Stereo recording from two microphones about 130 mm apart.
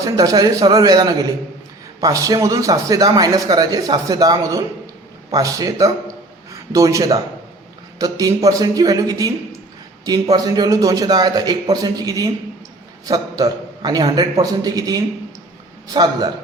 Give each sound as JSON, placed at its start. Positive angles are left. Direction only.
{"t": 0.0, "sound": "a man's voice", "side_deg": -30}